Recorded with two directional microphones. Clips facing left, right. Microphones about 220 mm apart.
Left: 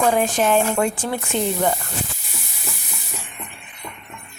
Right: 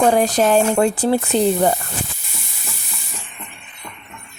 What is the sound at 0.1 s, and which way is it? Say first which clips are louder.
Speech: right 3 dB; 40° right (ahead or behind).